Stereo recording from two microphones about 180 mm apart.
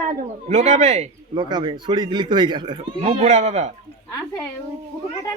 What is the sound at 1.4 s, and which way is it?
A man's voice, 25° right (ahead or behind).